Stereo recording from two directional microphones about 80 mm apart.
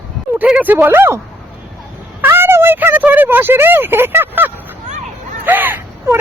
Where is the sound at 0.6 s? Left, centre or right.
Right.